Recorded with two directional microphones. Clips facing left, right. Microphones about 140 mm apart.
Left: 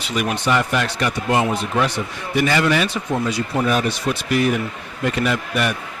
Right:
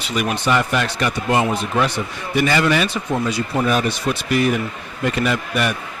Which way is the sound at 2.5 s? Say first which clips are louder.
Right 1 dB; 25° right (ahead or behind).